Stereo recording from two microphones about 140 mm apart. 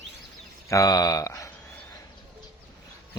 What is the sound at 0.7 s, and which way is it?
Speech, 25° left (ahead or behind).